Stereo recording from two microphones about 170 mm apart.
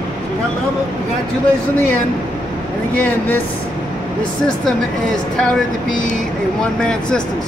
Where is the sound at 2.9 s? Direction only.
10° left (ahead or behind).